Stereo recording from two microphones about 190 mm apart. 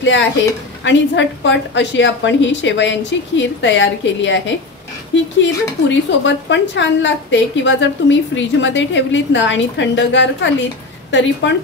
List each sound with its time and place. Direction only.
0.0 s a woman's voice: 75° left (ahead or behind)
5.4 s a woman's voice: 70° left (ahead or behind)